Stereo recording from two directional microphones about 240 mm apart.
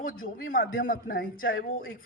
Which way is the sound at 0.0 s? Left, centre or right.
Left.